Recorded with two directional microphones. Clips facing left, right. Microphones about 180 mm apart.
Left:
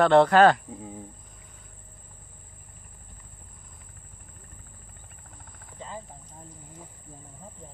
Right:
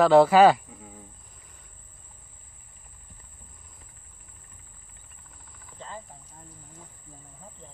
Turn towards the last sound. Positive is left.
turn(degrees=15)  # may be behind; listen again after turning